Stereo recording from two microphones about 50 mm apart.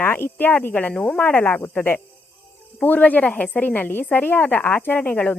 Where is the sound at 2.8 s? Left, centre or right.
Left.